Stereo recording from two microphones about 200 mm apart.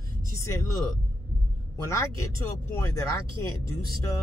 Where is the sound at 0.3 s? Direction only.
15° left (ahead or behind).